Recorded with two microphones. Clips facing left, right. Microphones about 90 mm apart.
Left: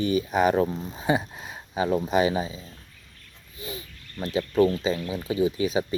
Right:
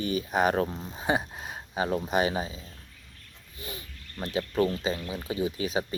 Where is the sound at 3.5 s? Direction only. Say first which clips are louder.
Left 4 dB; 55° right (ahead or behind).